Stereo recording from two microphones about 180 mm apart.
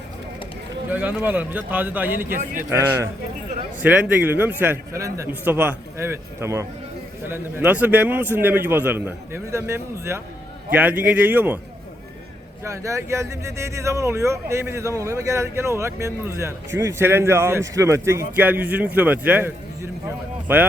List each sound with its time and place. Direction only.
0.9 s speech: 10° right (ahead or behind)
12.6 s speech: 15° right (ahead or behind)